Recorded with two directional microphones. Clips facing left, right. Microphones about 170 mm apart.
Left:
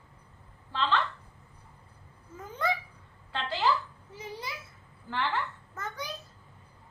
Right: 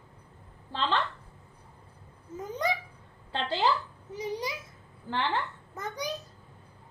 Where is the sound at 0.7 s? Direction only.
30° right (ahead or behind).